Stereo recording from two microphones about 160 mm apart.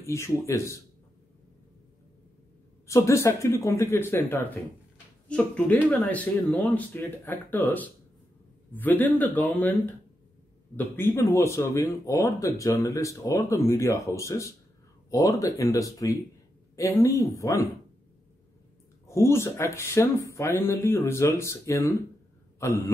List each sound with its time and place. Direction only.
0.0 s speech: 15° left (ahead or behind)
2.9 s speech: 20° left (ahead or behind); by 6.8 s centre (ahead or behind)
6.9 s speech: 10° left (ahead or behind)
8.7 s speech: 10° left (ahead or behind)
11.0 s speech: 15° left (ahead or behind)
19.0 s speech: 15° left (ahead or behind)